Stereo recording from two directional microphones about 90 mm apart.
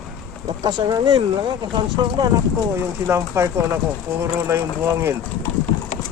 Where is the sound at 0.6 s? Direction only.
50° right (ahead or behind).